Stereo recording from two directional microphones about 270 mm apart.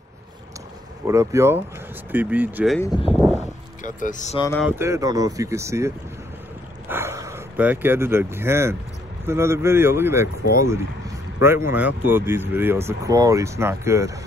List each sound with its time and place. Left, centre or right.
1.0 s speech: centre
2.8 s speech: centre
3.3 s a sound: left
4.6 s speech: centre
11.4 s speech: centre